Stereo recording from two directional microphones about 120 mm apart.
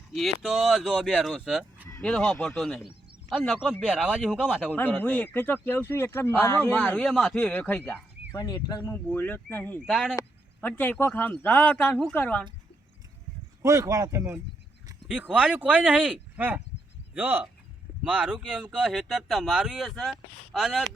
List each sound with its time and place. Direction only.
0.1 s speech: centre (ahead or behind)
2.0 s speech: 5° left (ahead or behind)
4.7 s a man's voice: 15° left (ahead or behind)
8.3 s a man's voice: 30° left (ahead or behind)
9.8 s speech: 5° right (ahead or behind)
10.6 s a man's voice: 10° left (ahead or behind)
13.6 s speech: 25° right (ahead or behind)
15.0 s speech: 10° right (ahead or behind)